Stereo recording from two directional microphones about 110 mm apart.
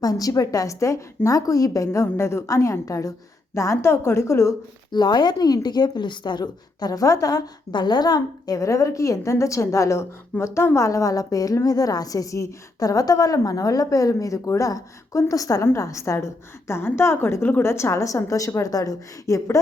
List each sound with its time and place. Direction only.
0.0 s a woman's voice: 35° left (ahead or behind)
4.9 s a woman's voice: 40° left (ahead or behind)